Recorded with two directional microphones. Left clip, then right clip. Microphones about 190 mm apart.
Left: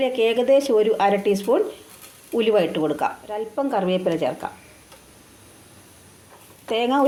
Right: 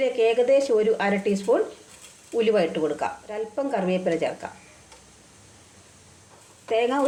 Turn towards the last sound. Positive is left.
turn(degrees=40)  # may be behind; listen again after turning